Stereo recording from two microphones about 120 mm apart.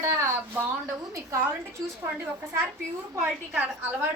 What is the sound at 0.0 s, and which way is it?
A woman's voice, 20° right (ahead or behind).